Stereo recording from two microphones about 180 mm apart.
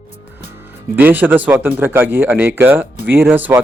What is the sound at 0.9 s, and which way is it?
Speech, 10° right (ahead or behind).